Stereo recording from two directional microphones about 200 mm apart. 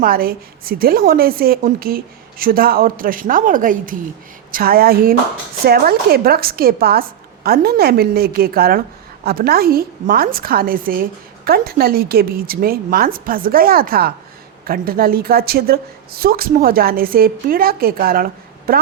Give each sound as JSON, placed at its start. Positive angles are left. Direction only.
{"t": 0.0, "sound": "a woman's voice", "side_deg": -45}